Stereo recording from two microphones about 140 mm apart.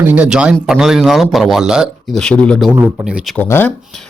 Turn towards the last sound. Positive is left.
turn(degrees=15)  # may be behind; listen again after turning